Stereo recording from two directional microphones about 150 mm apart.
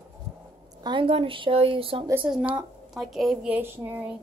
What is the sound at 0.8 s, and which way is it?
Speech, 35° right (ahead or behind).